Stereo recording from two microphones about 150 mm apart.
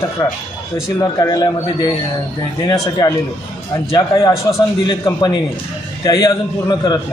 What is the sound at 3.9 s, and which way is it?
A man's voice, 20° left (ahead or behind).